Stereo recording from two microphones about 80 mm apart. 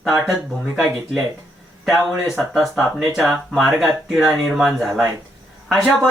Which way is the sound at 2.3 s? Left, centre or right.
Centre.